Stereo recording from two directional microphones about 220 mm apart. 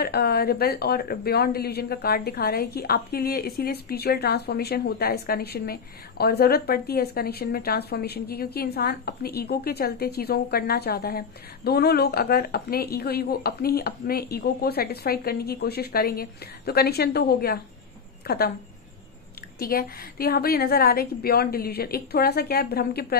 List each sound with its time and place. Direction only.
0.0 s a woman's voice: 45° left (ahead or behind)
19.6 s a woman's voice: 40° left (ahead or behind)